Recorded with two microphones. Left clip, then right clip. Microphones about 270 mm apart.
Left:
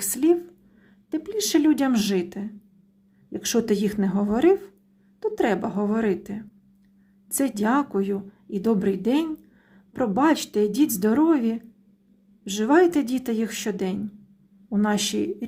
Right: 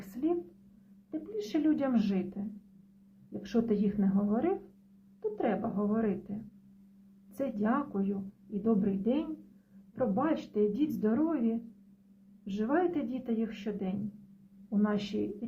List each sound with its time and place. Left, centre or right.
0.2 s speech: left
3.4 s speech: left
7.3 s speech: left
12.5 s speech: left